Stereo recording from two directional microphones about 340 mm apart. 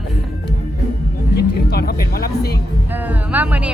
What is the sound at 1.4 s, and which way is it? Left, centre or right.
Speech, left.